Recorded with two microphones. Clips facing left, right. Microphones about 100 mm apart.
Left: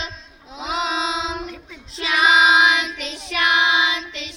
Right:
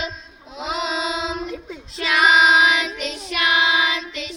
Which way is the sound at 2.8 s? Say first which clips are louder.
Right 3 dB; 40° right (ahead or behind).